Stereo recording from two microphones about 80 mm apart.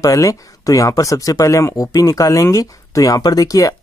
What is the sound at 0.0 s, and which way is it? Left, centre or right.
Speech, left.